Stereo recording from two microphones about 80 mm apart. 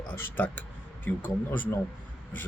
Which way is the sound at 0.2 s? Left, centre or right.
Left.